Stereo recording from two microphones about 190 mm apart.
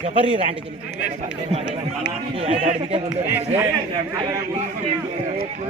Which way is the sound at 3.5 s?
25° right (ahead or behind).